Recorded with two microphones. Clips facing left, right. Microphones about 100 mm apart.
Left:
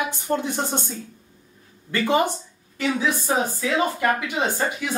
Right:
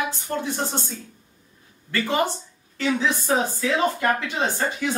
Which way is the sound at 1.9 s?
15° left (ahead or behind).